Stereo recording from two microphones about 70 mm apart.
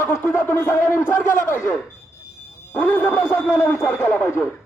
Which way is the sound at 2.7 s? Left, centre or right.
Left.